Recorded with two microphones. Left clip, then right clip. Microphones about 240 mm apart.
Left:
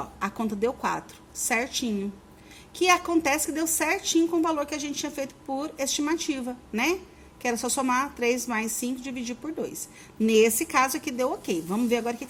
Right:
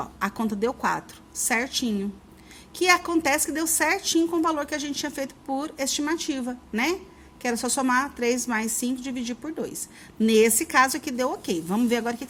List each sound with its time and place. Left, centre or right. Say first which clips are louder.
0.0 s a woman's voice: right 2 dB; centre